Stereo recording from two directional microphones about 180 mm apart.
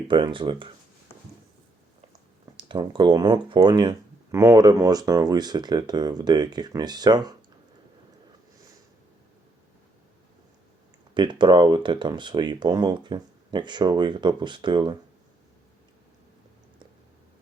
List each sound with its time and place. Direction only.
0.1 s speech: 25° right (ahead or behind)
2.6 s speech: 25° right (ahead or behind)
11.1 s speech: 25° right (ahead or behind)